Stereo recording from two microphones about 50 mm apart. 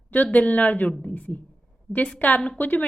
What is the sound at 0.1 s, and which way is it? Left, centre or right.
A woman's voice, left.